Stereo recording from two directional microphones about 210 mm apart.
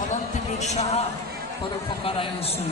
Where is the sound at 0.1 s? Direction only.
35° left (ahead or behind).